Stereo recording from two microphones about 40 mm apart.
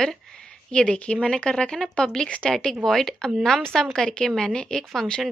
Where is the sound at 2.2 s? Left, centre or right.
Left.